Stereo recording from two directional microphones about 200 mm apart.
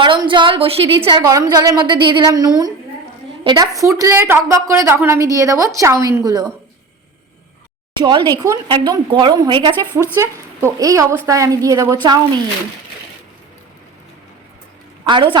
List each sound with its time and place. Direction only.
0.0 s a woman's voice: 25° right (ahead or behind)
8.0 s a woman's voice: 20° right (ahead or behind)
15.0 s speech: 25° right (ahead or behind)